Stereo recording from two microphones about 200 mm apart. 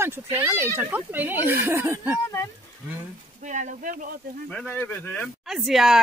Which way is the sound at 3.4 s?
40° right (ahead or behind).